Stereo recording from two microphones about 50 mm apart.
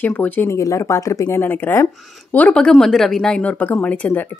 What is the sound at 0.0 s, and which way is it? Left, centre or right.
Speech, left.